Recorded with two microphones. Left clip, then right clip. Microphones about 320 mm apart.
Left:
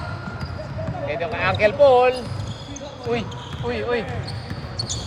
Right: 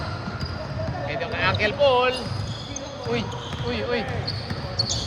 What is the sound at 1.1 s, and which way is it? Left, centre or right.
Speech, centre.